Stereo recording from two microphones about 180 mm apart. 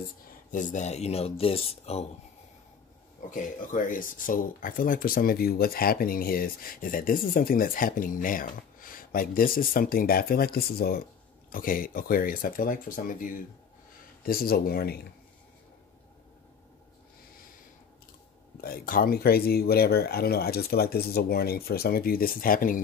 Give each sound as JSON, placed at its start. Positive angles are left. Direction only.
{"t": 0.5, "sound": "speech", "side_deg": 45}
{"t": 3.3, "sound": "speech", "side_deg": 45}
{"t": 18.6, "sound": "speech", "side_deg": 55}